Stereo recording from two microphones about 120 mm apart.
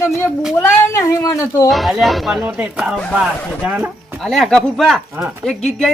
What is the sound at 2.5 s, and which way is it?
Speech, 10° right (ahead or behind).